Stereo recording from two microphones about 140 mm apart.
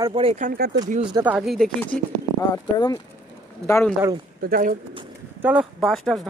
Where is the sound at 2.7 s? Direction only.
30° left (ahead or behind).